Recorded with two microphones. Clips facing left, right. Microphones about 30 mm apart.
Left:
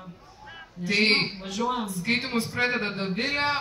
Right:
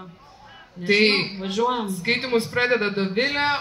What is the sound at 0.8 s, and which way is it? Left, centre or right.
A man's voice, right.